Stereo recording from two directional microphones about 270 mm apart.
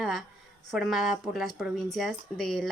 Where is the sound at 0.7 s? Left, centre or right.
Centre.